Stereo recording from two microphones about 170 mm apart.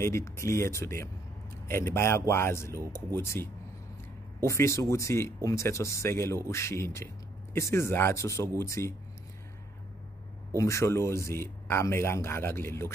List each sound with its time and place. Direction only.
0.0 s speech: 15° left (ahead or behind)
4.5 s speech: 15° left (ahead or behind)
10.6 s speech: 15° left (ahead or behind)